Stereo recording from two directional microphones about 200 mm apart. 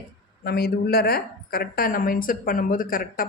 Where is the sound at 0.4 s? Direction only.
50° left (ahead or behind).